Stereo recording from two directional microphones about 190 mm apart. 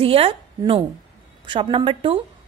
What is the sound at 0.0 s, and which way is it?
A woman's voice, 30° right (ahead or behind).